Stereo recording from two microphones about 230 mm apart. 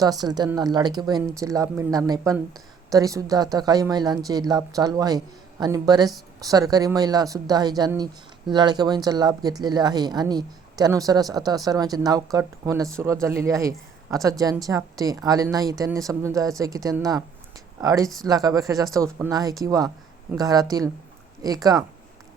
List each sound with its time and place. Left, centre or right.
0.0 s a woman's voice: centre